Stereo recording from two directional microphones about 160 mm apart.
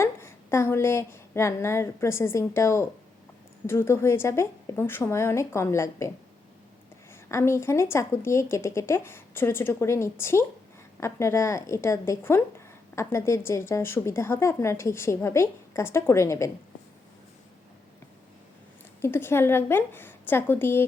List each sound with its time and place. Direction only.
0.0 s a woman's voice: 15° left (ahead or behind)
7.1 s a woman's voice: 15° left (ahead or behind)
19.0 s a woman's voice: 15° left (ahead or behind)